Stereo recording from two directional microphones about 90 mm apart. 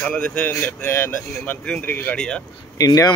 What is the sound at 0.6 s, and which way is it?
Speech, 25° left (ahead or behind).